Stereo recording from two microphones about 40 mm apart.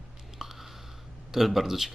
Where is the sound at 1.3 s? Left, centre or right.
Centre.